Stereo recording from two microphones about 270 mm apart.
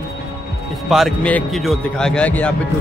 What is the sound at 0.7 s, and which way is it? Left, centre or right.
A man's voice, centre.